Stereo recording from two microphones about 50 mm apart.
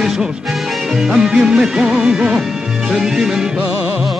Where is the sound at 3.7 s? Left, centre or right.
Right.